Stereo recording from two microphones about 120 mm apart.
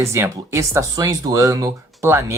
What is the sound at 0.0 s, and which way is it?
Speech, 25° right (ahead or behind).